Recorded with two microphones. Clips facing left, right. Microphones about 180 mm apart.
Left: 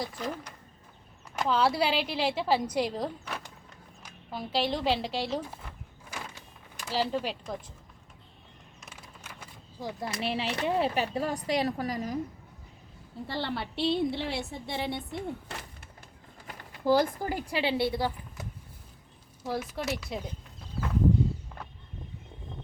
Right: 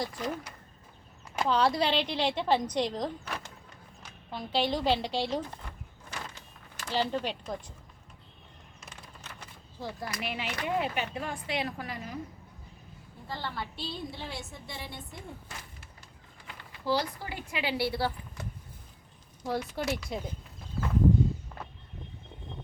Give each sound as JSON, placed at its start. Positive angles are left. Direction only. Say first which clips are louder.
{"t": 0.0, "sound": "a woman's voice", "louder": "right 1 dB", "side_deg": 0}
{"t": 8.8, "sound": "a sound", "louder": "even", "side_deg": 5}
{"t": 10.0, "sound": "speech", "louder": "left 6 dB", "side_deg": 30}
{"t": 13.2, "sound": "a woman's voice", "louder": "left 4 dB", "side_deg": 75}
{"t": 16.5, "sound": "speech", "louder": "left 5 dB", "side_deg": 45}
{"t": 19.5, "sound": "a woman's voice", "louder": "right 1 dB", "side_deg": 0}